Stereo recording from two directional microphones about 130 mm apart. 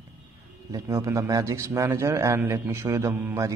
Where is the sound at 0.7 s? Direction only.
25° right (ahead or behind).